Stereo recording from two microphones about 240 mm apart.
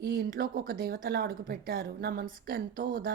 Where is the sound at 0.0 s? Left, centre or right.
Right.